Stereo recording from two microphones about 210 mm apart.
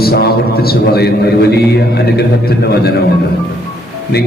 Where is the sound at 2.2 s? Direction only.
50° left (ahead or behind).